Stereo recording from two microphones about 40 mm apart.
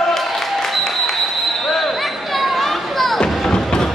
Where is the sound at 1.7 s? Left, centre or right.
Centre.